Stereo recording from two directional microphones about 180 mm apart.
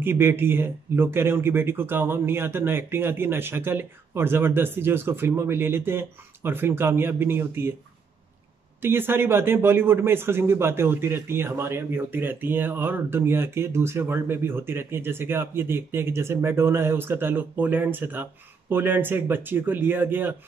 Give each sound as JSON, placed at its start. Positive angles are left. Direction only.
{"t": 0.0, "sound": "speech", "side_deg": -10}
{"t": 8.8, "sound": "speech", "side_deg": -10}